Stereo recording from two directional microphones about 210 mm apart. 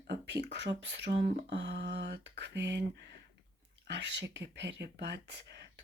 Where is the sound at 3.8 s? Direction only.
55° right (ahead or behind).